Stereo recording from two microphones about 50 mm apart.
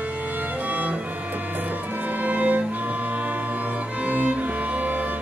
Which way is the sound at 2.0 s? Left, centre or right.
Right.